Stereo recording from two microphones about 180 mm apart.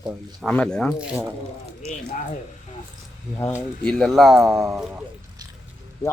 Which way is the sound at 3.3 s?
15° left (ahead or behind).